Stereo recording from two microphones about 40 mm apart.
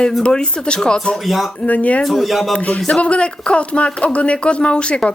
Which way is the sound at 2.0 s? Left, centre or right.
Centre.